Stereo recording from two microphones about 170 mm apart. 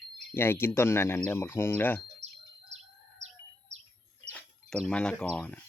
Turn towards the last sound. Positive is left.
turn(degrees=5)  # may be behind; listen again after turning